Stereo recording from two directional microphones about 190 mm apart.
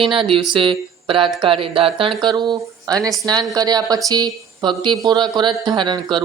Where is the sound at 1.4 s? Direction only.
30° right (ahead or behind).